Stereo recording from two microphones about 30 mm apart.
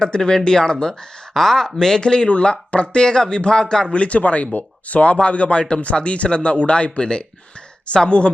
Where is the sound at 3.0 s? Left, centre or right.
Left.